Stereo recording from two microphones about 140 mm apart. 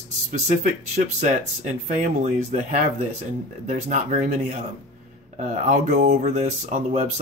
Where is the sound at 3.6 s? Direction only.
60° right (ahead or behind).